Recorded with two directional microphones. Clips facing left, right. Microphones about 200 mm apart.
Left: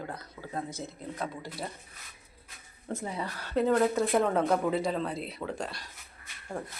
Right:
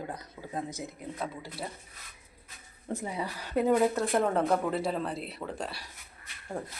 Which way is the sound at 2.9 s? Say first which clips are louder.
Right 1 dB; 15° right (ahead or behind).